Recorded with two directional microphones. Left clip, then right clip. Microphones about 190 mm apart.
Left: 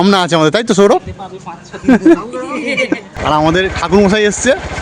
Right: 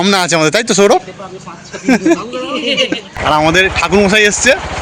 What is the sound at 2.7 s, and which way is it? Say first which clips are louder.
Speech: right 1 dB; 15° left (ahead or behind).